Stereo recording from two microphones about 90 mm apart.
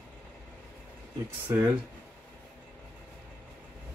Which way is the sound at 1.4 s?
20° right (ahead or behind).